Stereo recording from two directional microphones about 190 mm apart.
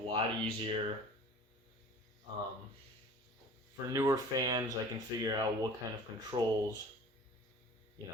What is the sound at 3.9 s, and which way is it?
Speech, 20° right (ahead or behind).